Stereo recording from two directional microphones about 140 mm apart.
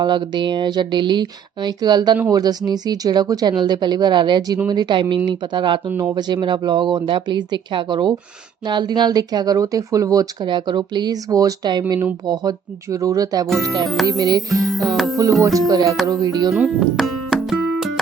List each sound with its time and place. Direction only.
0.0 s speech: 35° right (ahead or behind)
14.6 s music: centre (ahead or behind)
15.2 s speech: 25° right (ahead or behind)
16.5 s music: centre (ahead or behind)